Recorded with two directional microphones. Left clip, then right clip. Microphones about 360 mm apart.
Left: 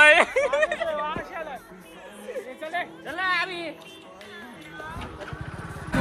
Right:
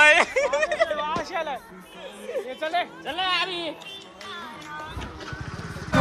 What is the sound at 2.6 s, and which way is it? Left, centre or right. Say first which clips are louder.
Speech: right 4 dB; centre.